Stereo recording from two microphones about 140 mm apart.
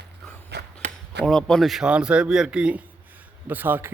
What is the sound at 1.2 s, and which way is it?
A man's voice, 5° left (ahead or behind).